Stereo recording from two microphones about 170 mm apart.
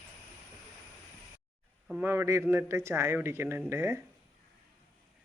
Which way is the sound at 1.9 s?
10° right (ahead or behind).